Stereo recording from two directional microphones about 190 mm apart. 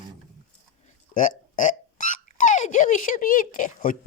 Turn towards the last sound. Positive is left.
turn(degrees=45)  # may be behind; listen again after turning